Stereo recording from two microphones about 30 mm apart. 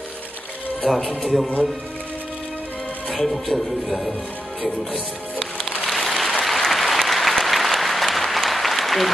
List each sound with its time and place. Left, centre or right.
0.8 s speech: centre
3.1 s speech: centre
4.9 s music: left
5.9 s applause: centre